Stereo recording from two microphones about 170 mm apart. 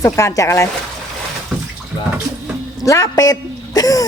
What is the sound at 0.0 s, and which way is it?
Speech, 15° left (ahead or behind).